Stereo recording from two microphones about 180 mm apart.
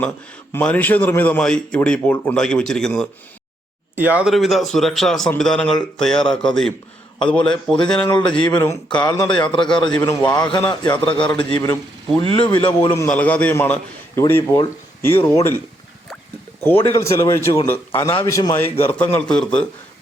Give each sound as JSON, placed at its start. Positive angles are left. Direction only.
{"t": 0.5, "sound": "a man's voice", "side_deg": 10}
{"t": 3.9, "sound": "a man's voice", "side_deg": -10}
{"t": 8.4, "sound": "a man's voice", "side_deg": 25}
{"t": 13.0, "sound": "a man's voice", "side_deg": 10}
{"t": 16.6, "sound": "a man's voice", "side_deg": 15}
{"t": 17.9, "sound": "a man's voice", "side_deg": 30}
{"t": 18.3, "sound": "a man's voice", "side_deg": 15}